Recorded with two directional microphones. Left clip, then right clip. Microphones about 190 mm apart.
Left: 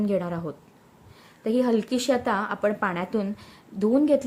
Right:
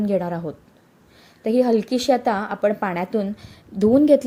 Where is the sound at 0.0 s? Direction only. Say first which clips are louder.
Right 4 dB; 15° right (ahead or behind).